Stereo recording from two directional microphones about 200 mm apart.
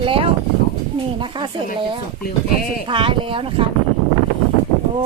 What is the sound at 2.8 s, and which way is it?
Speech, 25° right (ahead or behind).